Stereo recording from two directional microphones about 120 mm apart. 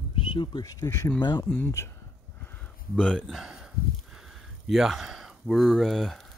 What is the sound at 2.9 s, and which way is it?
Speech, 5° left (ahead or behind).